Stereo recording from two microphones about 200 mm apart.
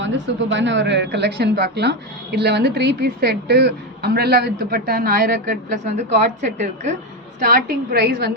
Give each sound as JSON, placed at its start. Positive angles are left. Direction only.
{"t": 0.0, "sound": "speech", "side_deg": -65}
{"t": 7.3, "sound": "a woman's voice", "side_deg": -45}